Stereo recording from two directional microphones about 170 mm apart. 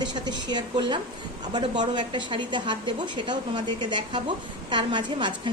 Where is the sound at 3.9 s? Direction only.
25° right (ahead or behind).